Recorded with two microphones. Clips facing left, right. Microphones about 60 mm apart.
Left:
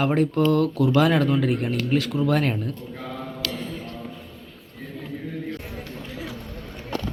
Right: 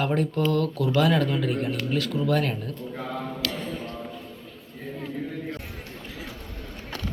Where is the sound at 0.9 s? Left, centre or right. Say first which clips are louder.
Left 2 dB; left.